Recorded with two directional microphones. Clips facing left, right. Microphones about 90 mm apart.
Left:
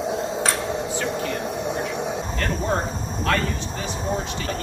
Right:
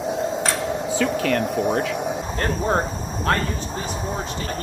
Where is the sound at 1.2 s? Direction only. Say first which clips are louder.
Right 5 dB; 90° right.